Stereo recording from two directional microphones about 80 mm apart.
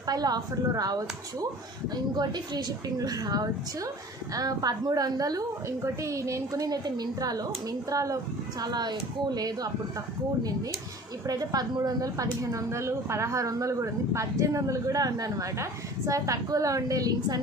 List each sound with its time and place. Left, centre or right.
0.0 s speech: right
5.8 s speech: right
11.2 s speech: right